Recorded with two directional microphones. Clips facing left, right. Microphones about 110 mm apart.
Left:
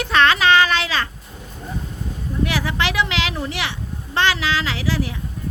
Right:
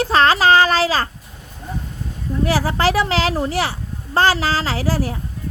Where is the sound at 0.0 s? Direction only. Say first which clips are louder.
Right 2 dB; 35° right (ahead or behind).